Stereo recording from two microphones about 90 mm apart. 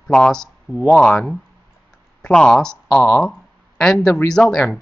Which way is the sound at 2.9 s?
20° left (ahead or behind).